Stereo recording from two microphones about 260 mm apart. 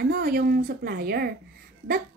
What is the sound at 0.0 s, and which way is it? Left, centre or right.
A woman's voice, right.